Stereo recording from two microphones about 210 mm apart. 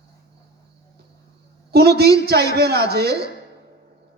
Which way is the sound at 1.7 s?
50° right (ahead or behind).